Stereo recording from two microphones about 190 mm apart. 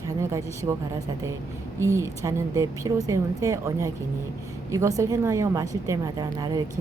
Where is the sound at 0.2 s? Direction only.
15° right (ahead or behind).